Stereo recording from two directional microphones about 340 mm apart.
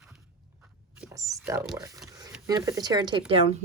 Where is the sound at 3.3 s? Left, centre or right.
Centre.